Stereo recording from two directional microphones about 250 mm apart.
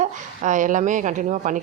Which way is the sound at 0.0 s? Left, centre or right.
Right.